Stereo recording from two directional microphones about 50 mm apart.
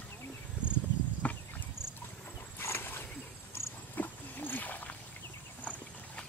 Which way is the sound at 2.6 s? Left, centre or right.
Left.